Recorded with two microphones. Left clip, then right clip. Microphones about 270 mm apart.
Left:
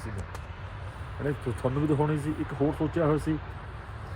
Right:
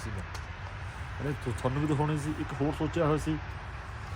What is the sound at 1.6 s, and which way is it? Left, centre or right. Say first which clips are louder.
Speech: left 3 dB; centre.